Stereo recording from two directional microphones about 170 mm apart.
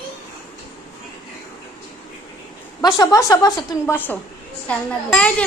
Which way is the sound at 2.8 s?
20° left (ahead or behind).